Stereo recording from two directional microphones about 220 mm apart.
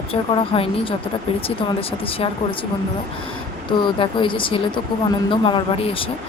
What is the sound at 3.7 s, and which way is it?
Speech, 20° left (ahead or behind).